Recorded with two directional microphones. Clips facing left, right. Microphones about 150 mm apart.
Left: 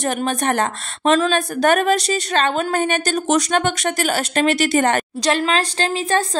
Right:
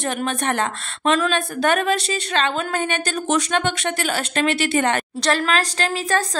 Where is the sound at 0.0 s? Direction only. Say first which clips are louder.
Left 3 dB; 35° left (ahead or behind).